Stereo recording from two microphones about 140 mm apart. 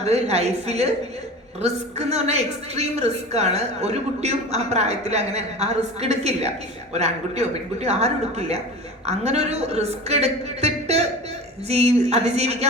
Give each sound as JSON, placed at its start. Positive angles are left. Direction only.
{"t": 0.0, "sound": "a woman's voice", "side_deg": -50}